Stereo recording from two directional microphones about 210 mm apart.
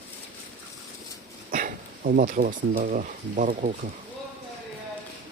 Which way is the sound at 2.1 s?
40° right (ahead or behind).